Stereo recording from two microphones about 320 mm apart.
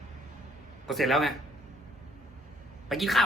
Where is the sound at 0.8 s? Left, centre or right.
Centre.